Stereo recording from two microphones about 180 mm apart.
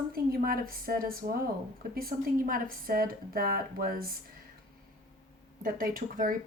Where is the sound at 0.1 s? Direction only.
55° right (ahead or behind).